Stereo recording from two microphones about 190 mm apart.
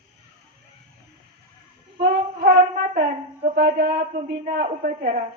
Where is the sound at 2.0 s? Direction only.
55° right (ahead or behind).